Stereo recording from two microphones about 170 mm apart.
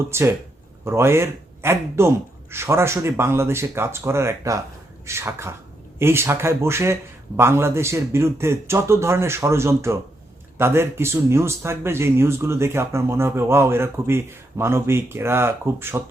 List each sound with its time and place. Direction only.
0.1 s speech: 15° right (ahead or behind)